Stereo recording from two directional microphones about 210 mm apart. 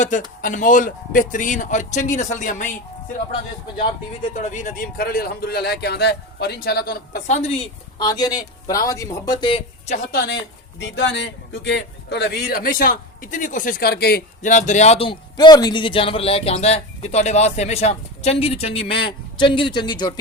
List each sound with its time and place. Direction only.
0.0 s a man's voice: 35° left (ahead or behind)
4.4 s a man's voice: 35° left (ahead or behind)
10.8 s a man's voice: 60° left (ahead or behind); by 20.1 s 20° left (ahead or behind)